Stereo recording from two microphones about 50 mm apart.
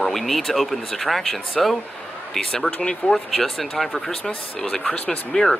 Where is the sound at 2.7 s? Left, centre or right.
Left.